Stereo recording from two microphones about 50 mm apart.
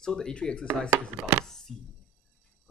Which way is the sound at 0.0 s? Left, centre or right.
Centre.